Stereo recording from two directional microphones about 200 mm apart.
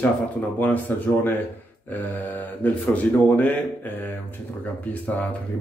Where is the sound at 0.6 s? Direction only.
10° left (ahead or behind).